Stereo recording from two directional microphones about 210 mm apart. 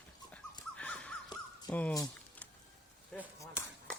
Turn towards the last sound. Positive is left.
turn(degrees=5)  # may be behind; listen again after turning